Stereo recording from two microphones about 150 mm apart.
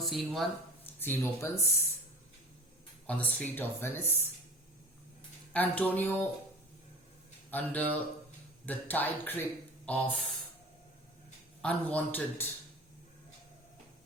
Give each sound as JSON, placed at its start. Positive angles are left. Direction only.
{"t": 0.0, "sound": "speech", "side_deg": 0}
{"t": 1.0, "sound": "speech", "side_deg": 15}
{"t": 3.1, "sound": "speech", "side_deg": 10}
{"t": 5.5, "sound": "speech", "side_deg": 10}
{"t": 7.5, "sound": "speech", "side_deg": 10}
{"t": 11.6, "sound": "speech", "side_deg": 10}